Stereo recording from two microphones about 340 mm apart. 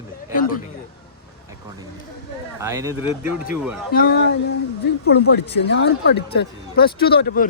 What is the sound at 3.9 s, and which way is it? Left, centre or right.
Speech, left.